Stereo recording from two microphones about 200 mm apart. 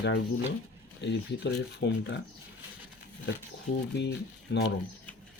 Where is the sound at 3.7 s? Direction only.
35° left (ahead or behind).